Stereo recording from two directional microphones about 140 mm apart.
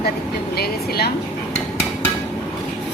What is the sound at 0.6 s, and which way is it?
Speech, 90° left.